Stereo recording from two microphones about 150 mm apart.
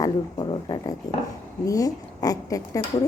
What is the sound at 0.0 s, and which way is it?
Speech, 25° left (ahead or behind).